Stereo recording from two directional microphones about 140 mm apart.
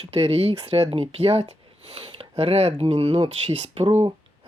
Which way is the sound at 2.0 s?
35° right (ahead or behind).